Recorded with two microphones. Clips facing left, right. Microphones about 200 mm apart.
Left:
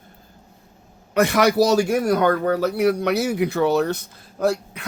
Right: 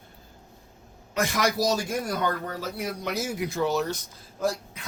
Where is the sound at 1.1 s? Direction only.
65° left (ahead or behind).